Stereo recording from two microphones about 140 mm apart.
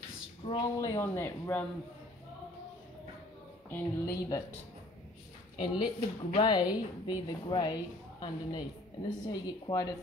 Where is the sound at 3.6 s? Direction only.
15° left (ahead or behind).